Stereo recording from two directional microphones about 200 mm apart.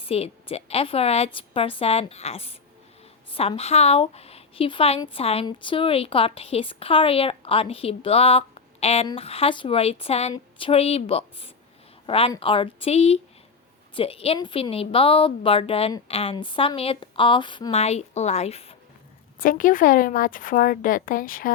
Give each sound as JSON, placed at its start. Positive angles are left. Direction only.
{"t": 0.0, "sound": "a woman's voice", "side_deg": 30}
{"t": 19.4, "sound": "a woman's voice", "side_deg": 45}